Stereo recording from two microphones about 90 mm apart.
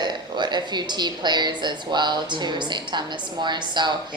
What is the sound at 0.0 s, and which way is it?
A woman's voice, 55° right (ahead or behind).